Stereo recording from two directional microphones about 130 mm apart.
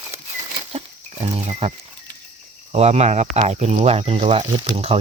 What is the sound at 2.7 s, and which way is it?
Speech, 55° right (ahead or behind).